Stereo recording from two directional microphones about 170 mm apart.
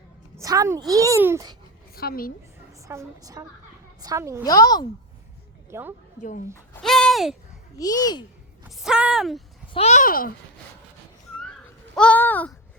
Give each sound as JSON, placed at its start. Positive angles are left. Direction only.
{"t": 0.3, "sound": "a child's voice", "side_deg": -20}
{"t": 2.0, "sound": "a woman's voice", "side_deg": 60}
{"t": 2.8, "sound": "a child's voice", "side_deg": -20}
{"t": 4.4, "sound": "speech", "side_deg": 20}
{"t": 5.7, "sound": "a woman's voice", "side_deg": -15}
{"t": 6.1, "sound": "a child's voice", "side_deg": 50}
{"t": 6.8, "sound": "a sound", "side_deg": 0}
{"t": 7.8, "sound": "speech", "side_deg": 20}
{"t": 8.7, "sound": "speech", "side_deg": -5}
{"t": 9.7, "sound": "a child's voice", "side_deg": 40}
{"t": 11.9, "sound": "a sound", "side_deg": 10}